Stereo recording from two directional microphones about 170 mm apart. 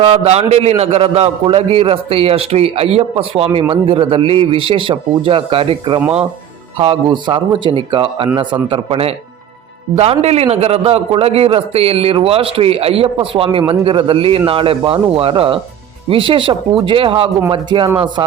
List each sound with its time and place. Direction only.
0.0 s a man's voice: 35° right (ahead or behind)